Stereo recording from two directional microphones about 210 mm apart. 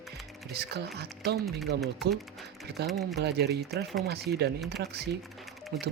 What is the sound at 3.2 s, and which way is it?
Speech, 50° right (ahead or behind).